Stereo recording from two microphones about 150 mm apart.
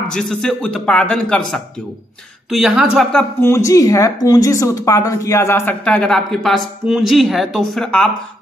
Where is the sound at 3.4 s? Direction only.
20° left (ahead or behind).